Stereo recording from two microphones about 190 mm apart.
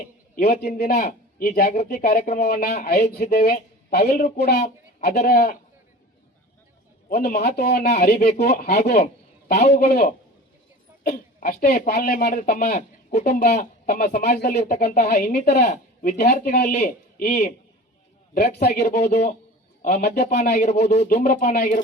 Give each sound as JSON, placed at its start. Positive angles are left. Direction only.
{"t": 0.6, "sound": "speech", "side_deg": 50}
{"t": 7.3, "sound": "speech", "side_deg": 55}
{"t": 8.3, "sound": "speech", "side_deg": 35}
{"t": 9.6, "sound": "speech", "side_deg": 55}
{"t": 11.0, "sound": "speech", "side_deg": 45}
{"t": 14.5, "sound": "speech", "side_deg": 35}
{"t": 14.8, "sound": "speech", "side_deg": 45}
{"t": 15.6, "sound": "a man's voice", "side_deg": 40}
{"t": 18.3, "sound": "speech", "side_deg": 60}
{"t": 18.7, "sound": "speech", "side_deg": 40}
{"t": 20.1, "sound": "speech", "side_deg": 55}
{"t": 20.5, "sound": "speech", "side_deg": 40}